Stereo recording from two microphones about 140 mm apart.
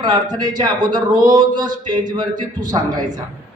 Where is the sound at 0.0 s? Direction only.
30° right (ahead or behind).